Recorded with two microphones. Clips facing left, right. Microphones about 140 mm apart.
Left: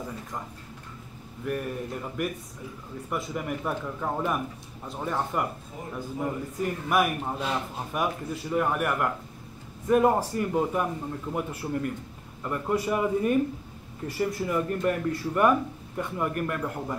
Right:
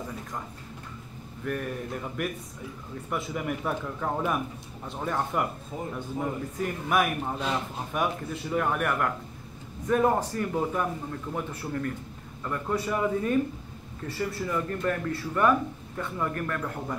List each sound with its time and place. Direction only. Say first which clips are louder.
1.4 s a man's voice: left 1 dB; 5° left (ahead or behind)
6.6 s a man's voice: left 1 dB; centre (ahead or behind)